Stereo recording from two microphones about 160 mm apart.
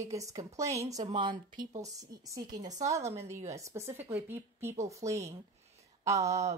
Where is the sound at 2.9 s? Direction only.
20° right (ahead or behind).